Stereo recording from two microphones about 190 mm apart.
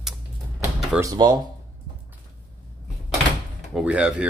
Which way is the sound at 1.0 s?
20° right (ahead or behind).